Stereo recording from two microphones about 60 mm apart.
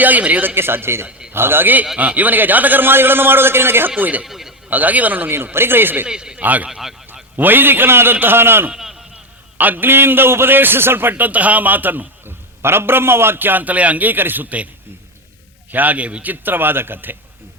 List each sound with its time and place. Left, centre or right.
0.0 s a man's voice: right
0.5 s a man's voice: right
4.2 s a sound: centre
4.7 s a man's voice: right
5.3 s a man's voice: right
6.1 s speech: centre
6.4 s a man's voice: right
6.7 s speech: centre
7.3 s a man's voice: right
8.7 s a sound: centre
9.6 s a man's voice: right
15.7 s a man's voice: right